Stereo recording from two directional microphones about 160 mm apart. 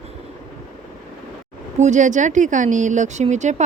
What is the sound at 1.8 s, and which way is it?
Speech, 50° right (ahead or behind).